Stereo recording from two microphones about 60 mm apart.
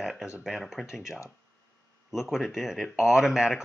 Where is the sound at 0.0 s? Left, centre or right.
Centre.